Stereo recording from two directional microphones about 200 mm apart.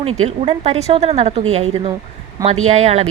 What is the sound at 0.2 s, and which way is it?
A woman's voice, 30° right (ahead or behind).